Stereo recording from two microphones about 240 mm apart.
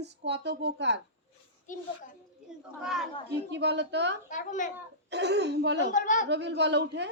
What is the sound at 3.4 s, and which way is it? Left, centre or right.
Speech, right.